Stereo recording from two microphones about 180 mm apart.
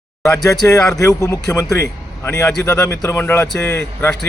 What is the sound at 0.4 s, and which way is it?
Speech, 15° left (ahead or behind).